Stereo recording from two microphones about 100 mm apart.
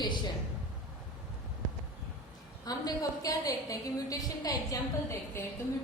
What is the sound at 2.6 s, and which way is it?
A woman's voice, 40° left (ahead or behind).